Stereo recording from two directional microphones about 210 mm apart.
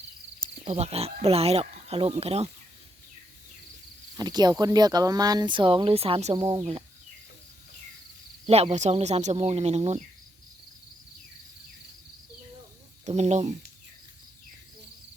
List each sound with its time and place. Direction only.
0.7 s speech: 30° right (ahead or behind)
4.2 s speech: 20° right (ahead or behind)
8.4 s speech: 30° right (ahead or behind)
13.1 s speech: 35° right (ahead or behind)